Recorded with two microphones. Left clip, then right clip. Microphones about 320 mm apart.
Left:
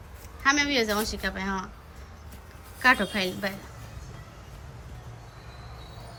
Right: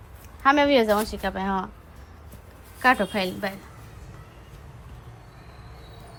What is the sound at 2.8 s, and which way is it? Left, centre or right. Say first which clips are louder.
Speech: right 1 dB; centre.